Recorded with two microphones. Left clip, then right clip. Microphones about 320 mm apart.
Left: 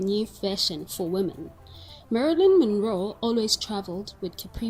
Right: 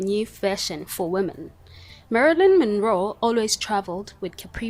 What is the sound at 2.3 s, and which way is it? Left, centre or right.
Speech, right.